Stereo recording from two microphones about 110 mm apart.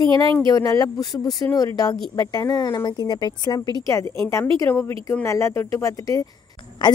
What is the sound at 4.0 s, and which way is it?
Speech, 25° left (ahead or behind).